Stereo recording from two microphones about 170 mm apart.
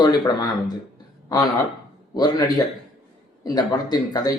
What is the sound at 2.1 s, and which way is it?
Speech, 25° left (ahead or behind).